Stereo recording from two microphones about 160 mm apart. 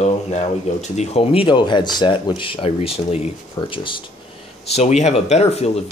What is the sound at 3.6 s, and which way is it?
Speech, 25° left (ahead or behind).